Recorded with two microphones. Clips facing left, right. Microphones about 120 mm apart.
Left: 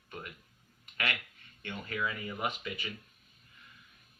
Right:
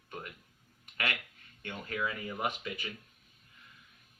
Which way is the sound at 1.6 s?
30° right (ahead or behind).